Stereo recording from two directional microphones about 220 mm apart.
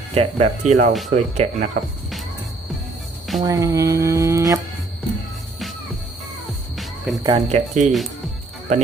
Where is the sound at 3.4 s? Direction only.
15° right (ahead or behind).